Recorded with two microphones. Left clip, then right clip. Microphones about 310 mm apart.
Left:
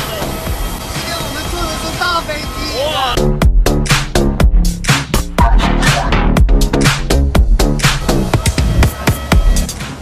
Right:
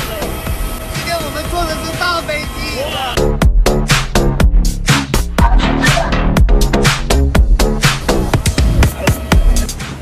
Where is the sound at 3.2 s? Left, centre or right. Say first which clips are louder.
Right 1 dB; centre.